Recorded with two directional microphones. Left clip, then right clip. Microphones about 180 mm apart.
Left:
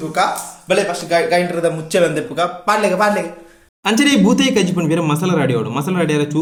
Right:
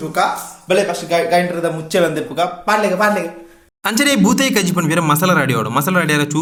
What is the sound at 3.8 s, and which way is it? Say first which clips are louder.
Speech: left 1 dB; 25° right (ahead or behind).